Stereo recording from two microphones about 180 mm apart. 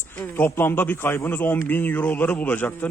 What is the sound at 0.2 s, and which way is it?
Speech, 10° left (ahead or behind).